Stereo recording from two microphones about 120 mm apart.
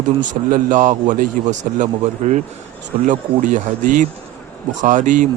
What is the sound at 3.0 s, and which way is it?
A man's voice, 90° right.